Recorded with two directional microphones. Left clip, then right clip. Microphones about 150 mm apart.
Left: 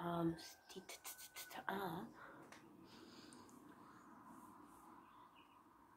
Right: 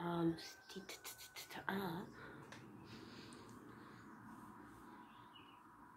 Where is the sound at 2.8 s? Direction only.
15° left (ahead or behind).